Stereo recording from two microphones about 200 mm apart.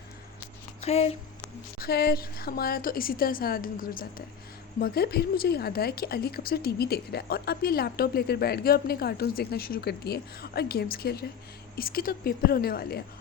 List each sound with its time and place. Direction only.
0.8 s speech: 30° left (ahead or behind)
1.8 s a woman's voice: 50° left (ahead or behind)